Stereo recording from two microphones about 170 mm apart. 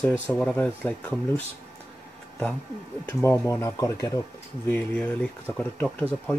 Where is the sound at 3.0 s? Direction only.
15° left (ahead or behind).